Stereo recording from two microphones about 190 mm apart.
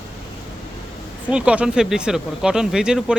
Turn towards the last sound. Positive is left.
turn(degrees=-5)  # may be behind; listen again after turning